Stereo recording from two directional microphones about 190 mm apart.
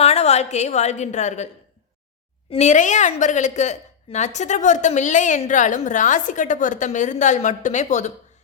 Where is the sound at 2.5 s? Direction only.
40° left (ahead or behind).